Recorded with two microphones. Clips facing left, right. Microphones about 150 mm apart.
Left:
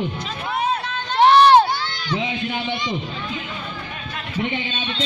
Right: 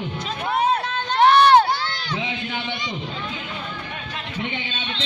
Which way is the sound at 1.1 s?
25° left (ahead or behind).